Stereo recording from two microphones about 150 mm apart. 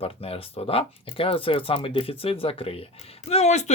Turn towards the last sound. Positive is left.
turn(degrees=50)  # may be behind; listen again after turning